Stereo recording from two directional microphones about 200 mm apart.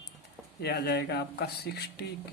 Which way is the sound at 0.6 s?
55° left (ahead or behind).